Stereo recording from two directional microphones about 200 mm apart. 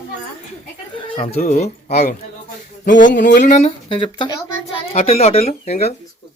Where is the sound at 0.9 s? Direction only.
25° left (ahead or behind).